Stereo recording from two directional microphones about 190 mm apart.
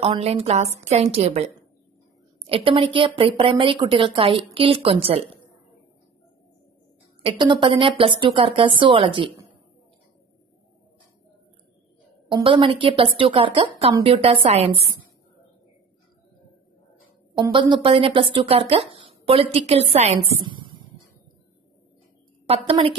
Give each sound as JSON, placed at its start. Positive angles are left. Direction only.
{"t": 0.0, "sound": "a woman's voice", "side_deg": -30}
{"t": 7.2, "sound": "a woman's voice", "side_deg": -25}
{"t": 12.3, "sound": "a woman's voice", "side_deg": -25}
{"t": 17.5, "sound": "a woman's voice", "side_deg": -25}
{"t": 20.4, "sound": "a sound", "side_deg": -25}
{"t": 22.5, "sound": "a woman's voice", "side_deg": -30}